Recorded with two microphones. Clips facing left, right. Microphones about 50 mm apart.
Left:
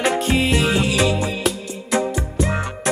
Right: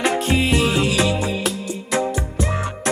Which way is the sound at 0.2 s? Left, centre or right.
Centre.